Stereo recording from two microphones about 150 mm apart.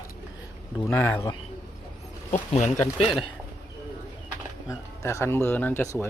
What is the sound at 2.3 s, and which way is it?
Speech, 50° left (ahead or behind).